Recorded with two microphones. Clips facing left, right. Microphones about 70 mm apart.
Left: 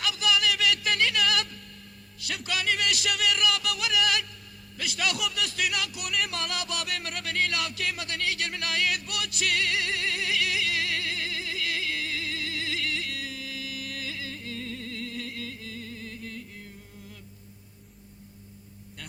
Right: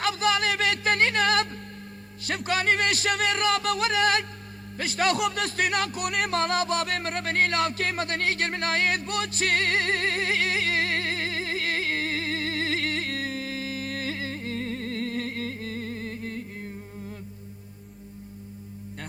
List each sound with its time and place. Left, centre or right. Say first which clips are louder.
0.0 s music: right 3 dB; right
2.2 s speech: right 5 dB; right
4.8 s music: right 6 dB; right